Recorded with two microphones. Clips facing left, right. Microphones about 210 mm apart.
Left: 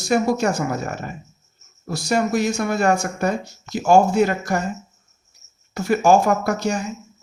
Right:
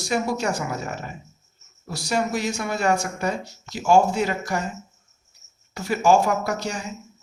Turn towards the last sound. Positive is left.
turn(degrees=50)  # may be behind; listen again after turning